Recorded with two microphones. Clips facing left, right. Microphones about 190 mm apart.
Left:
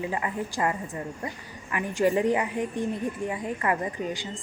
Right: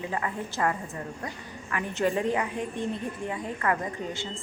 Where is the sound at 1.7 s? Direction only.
15° left (ahead or behind).